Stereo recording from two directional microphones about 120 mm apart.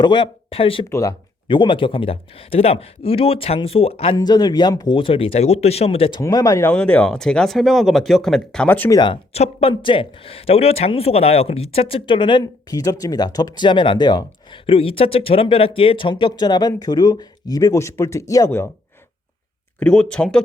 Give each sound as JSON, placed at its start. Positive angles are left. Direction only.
{"t": 0.0, "sound": "speech", "side_deg": 40}
{"t": 0.9, "sound": "speech", "side_deg": 25}
{"t": 1.5, "sound": "speech", "side_deg": 45}
{"t": 4.2, "sound": "speech", "side_deg": 35}
{"t": 4.9, "sound": "speech", "side_deg": 50}
{"t": 6.1, "sound": "speech", "side_deg": 30}
{"t": 6.7, "sound": "speech", "side_deg": 10}
{"t": 8.9, "sound": "speech", "side_deg": 40}
{"t": 9.3, "sound": "speech", "side_deg": 55}
{"t": 12.4, "sound": "speech", "side_deg": 30}
{"t": 14.7, "sound": "speech", "side_deg": 50}
{"t": 19.8, "sound": "speech", "side_deg": 5}